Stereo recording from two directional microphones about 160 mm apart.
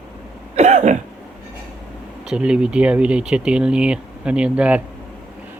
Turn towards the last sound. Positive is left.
turn(degrees=-5)  # may be behind; listen again after turning